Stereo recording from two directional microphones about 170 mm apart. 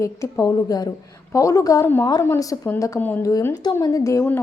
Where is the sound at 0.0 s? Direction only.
15° left (ahead or behind).